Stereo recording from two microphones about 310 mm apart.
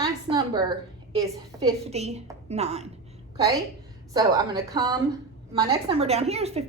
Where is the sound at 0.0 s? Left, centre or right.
Centre.